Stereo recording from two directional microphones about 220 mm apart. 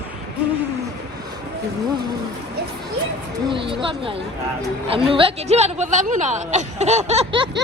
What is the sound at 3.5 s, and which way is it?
A woman's voice, 25° right (ahead or behind).